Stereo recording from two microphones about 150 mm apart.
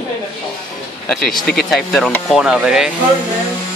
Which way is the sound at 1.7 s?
Centre (ahead or behind).